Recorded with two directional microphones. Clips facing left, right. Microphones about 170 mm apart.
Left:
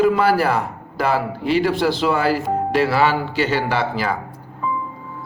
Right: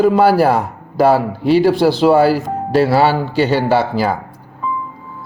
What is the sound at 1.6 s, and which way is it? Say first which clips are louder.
Speech: right 7 dB; 35° right (ahead or behind).